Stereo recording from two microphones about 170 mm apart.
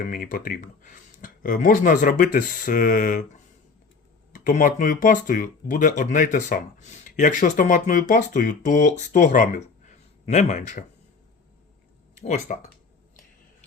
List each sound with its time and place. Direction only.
0.0 s speech: 55° left (ahead or behind)
12.2 s speech: 45° left (ahead or behind)